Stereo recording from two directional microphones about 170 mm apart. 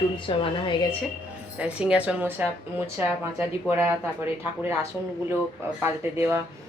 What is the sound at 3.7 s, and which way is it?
Speech, 10° right (ahead or behind).